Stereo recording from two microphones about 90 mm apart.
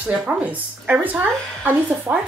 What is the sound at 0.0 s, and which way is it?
A woman's voice, 15° right (ahead or behind).